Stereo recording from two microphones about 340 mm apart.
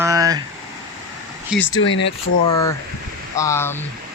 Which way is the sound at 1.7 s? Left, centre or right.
Left.